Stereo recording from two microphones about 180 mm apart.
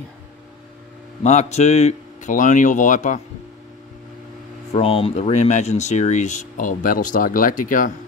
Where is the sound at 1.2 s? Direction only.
40° left (ahead or behind).